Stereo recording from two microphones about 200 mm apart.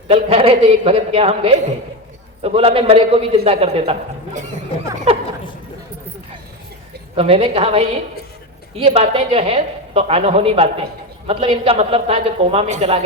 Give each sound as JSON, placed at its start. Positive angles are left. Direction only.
{"t": 0.1, "sound": "a woman's voice", "side_deg": -30}
{"t": 7.2, "sound": "a woman's voice", "side_deg": -30}